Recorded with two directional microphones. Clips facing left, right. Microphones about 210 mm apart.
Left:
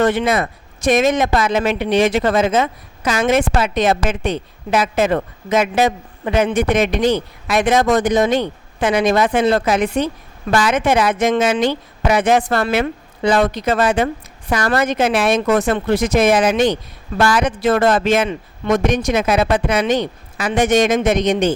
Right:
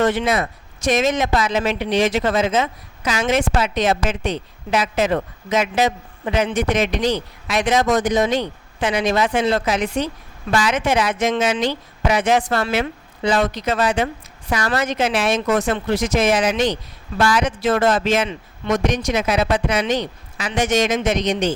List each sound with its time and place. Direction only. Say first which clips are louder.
0.0 s a woman's voice: left 2 dB; 55° left (ahead or behind)